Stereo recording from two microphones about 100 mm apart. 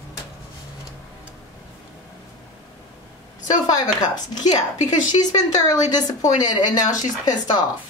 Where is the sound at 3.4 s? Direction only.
40° left (ahead or behind).